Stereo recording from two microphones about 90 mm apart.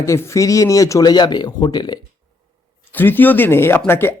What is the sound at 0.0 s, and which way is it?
Speech, 35° left (ahead or behind).